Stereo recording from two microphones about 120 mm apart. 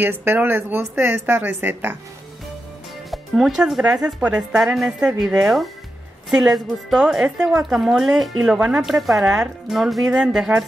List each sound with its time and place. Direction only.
0.0 s speech: 20° right (ahead or behind)
3.1 s a woman's voice: centre (ahead or behind)